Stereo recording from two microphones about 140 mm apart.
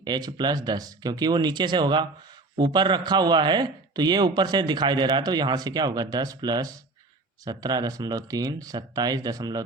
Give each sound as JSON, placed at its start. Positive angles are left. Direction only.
{"t": 0.0, "sound": "a man's voice", "side_deg": -30}